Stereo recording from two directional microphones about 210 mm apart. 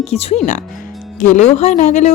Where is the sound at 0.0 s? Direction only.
30° left (ahead or behind).